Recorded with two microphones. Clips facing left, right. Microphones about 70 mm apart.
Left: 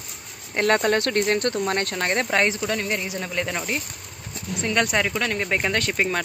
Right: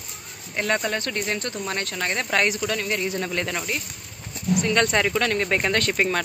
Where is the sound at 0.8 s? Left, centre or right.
Left.